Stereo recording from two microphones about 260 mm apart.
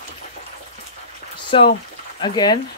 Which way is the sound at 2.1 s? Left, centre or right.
Centre.